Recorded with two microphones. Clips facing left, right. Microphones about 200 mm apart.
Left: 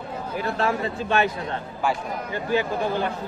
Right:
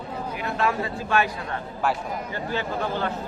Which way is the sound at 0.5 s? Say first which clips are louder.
Right 1 dB; 25° left (ahead or behind).